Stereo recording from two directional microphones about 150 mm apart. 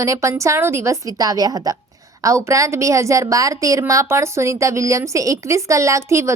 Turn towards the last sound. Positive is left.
turn(degrees=-20)  # may be behind; listen again after turning